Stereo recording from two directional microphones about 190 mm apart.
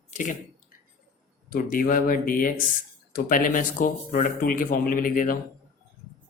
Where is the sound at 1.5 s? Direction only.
50° left (ahead or behind).